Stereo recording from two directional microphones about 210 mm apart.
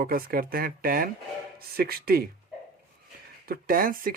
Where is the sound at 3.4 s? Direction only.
45° right (ahead or behind).